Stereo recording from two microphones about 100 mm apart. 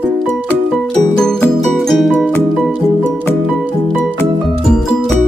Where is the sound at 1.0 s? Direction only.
5° left (ahead or behind).